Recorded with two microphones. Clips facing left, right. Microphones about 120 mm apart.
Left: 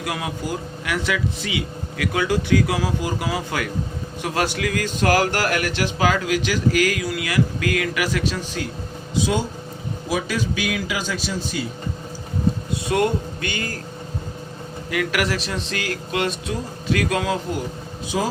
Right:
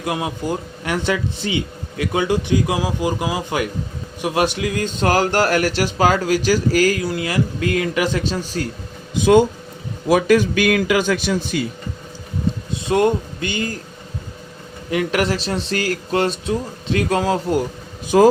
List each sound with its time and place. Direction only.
0.0 s speech: 25° right (ahead or behind)
9.1 s a man's voice: 55° right (ahead or behind)
12.9 s speech: 25° right (ahead or behind)
14.8 s speech: 30° right (ahead or behind)
18.1 s a man's voice: 60° right (ahead or behind)